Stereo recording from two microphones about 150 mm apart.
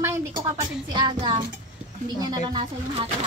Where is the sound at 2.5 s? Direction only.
30° right (ahead or behind).